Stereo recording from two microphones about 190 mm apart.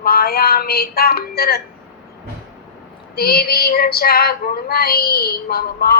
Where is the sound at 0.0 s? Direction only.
55° left (ahead or behind).